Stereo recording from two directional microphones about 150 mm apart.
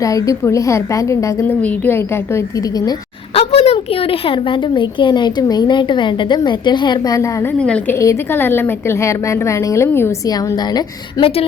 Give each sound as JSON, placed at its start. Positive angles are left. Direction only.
{"t": 0.0, "sound": "a woman's voice", "side_deg": 20}
{"t": 3.3, "sound": "a woman's voice", "side_deg": 40}
{"t": 7.6, "sound": "a woman's voice", "side_deg": 5}